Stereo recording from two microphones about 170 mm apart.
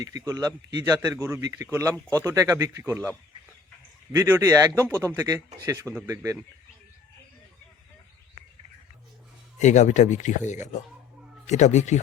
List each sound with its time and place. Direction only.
0.0 s speech: 20° right (ahead or behind)
4.1 s speech: 15° right (ahead or behind)
9.6 s speech: 45° left (ahead or behind)